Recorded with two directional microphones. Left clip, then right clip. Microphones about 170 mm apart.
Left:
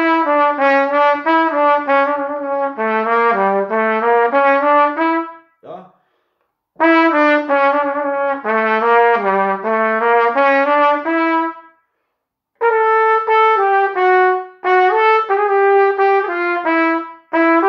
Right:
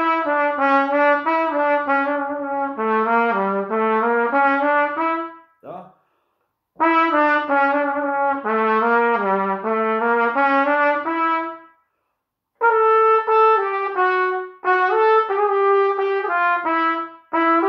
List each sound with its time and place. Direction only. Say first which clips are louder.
0.0 s trumpet: left 5 dB; 20° left (ahead or behind)
6.8 s trumpet: left 4 dB; 15° left (ahead or behind)
12.5 s brass instrument: left 2 dB; 15° left (ahead or behind)